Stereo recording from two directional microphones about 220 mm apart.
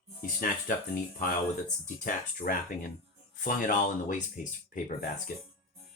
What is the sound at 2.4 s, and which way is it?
Speech, 40° left (ahead or behind).